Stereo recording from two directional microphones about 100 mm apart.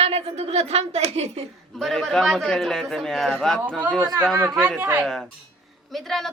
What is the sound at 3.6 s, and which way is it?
Speech, 20° right (ahead or behind).